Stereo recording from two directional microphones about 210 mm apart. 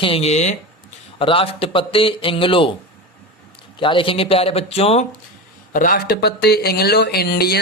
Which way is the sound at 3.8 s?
25° left (ahead or behind).